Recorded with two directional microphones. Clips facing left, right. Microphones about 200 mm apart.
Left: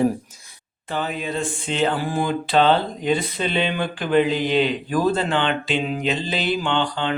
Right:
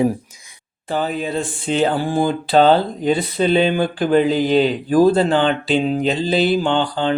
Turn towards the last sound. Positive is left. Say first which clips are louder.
# right 4 dB
turn(degrees=-35)  # may be behind; listen again after turning